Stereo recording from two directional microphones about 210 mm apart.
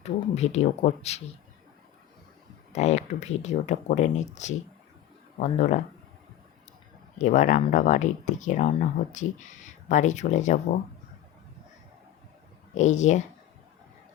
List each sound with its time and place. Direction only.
0.0 s speech: 30° left (ahead or behind)
2.7 s speech: 30° left (ahead or behind)
7.2 s speech: 35° left (ahead or behind)
12.7 s speech: 35° left (ahead or behind)